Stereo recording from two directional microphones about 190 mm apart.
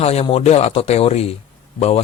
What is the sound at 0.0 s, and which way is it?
Speech, 30° left (ahead or behind).